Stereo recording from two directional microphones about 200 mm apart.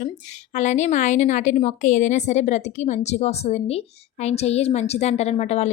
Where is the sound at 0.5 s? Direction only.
35° left (ahead or behind).